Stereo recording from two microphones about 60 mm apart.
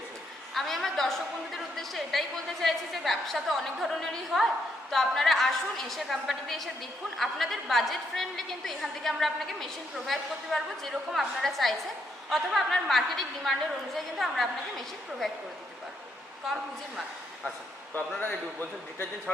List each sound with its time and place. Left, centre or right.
0.5 s a woman's voice: centre
16.5 s a woman's voice: centre
18.2 s a man's voice: left